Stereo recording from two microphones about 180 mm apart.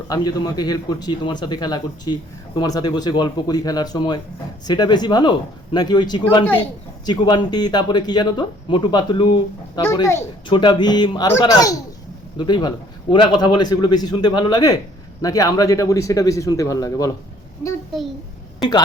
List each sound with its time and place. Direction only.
0.1 s speech: 20° left (ahead or behind)